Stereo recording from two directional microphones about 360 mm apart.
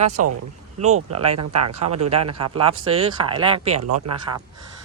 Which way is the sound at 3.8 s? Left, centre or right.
Right.